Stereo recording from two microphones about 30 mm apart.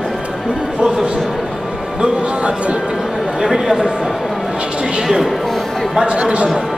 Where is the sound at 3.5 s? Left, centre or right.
Centre.